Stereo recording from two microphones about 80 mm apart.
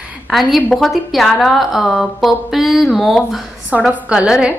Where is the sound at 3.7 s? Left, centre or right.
Centre.